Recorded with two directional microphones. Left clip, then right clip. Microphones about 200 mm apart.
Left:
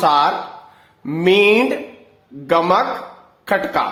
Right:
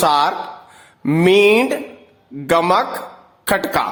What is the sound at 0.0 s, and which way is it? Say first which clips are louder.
A man's voice: left 1 dB; 25° right (ahead or behind).